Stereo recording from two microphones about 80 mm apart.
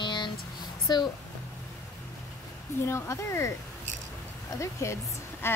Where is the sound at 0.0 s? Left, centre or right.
Left.